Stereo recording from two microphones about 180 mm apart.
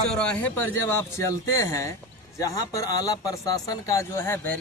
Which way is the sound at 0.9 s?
20° left (ahead or behind).